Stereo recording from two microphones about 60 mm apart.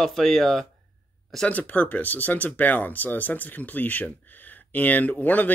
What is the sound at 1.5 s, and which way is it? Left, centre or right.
Speech, left.